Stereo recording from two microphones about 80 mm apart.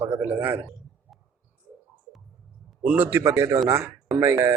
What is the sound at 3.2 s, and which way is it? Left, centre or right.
Speech, right.